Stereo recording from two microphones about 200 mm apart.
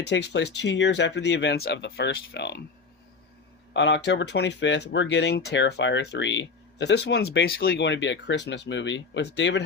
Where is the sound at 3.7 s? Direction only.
65° left (ahead or behind).